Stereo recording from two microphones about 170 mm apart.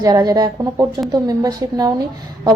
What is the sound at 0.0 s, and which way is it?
A woman's voice, 20° right (ahead or behind).